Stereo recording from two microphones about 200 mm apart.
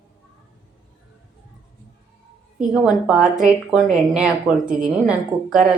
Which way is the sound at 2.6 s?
5° right (ahead or behind).